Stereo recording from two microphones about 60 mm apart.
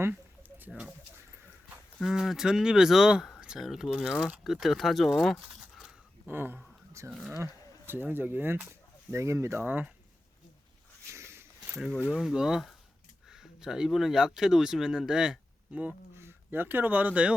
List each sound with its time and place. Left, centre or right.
0.1 s a sound: right
0.7 s speech: centre
2.0 s speech: centre
5.4 s keys jangling: centre
6.2 s speech: right
7.0 s speech: right
7.9 s speech: right
8.6 s speech: right
9.6 s speech: right
11.1 s a sound: right
12.1 s speech: centre
15.7 s speech: right
16.1 s speech: right